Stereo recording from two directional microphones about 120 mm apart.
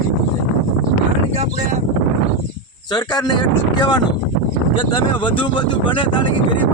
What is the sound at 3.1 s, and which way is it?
Speech, 35° left (ahead or behind).